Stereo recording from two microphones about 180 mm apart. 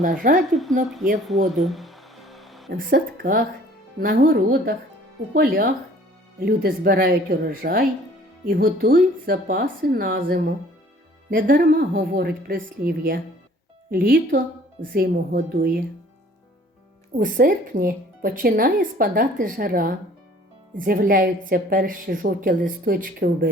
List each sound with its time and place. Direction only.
0.0 s speech: 50° right (ahead or behind)
1.3 s music: centre (ahead or behind)
2.7 s a woman's voice: 50° right (ahead or behind)
17.2 s speech: 55° right (ahead or behind)